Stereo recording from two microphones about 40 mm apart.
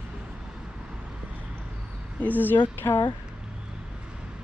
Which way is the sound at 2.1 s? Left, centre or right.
Left.